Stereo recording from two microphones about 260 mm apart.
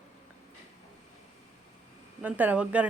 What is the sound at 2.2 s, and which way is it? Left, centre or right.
Speech, centre.